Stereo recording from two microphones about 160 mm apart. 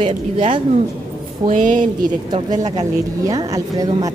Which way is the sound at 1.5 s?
55° right (ahead or behind).